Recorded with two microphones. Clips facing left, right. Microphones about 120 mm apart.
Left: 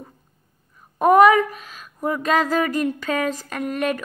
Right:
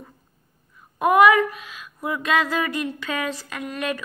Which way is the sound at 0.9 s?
40° left (ahead or behind).